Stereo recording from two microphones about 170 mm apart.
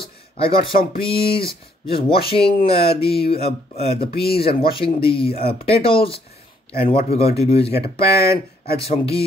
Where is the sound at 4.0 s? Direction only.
65° left (ahead or behind).